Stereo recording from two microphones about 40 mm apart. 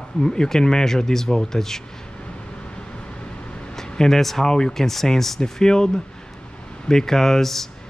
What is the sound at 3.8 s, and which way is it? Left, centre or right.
Speech, centre.